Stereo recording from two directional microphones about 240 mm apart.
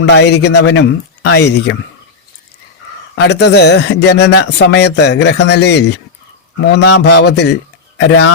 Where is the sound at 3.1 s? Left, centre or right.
Left.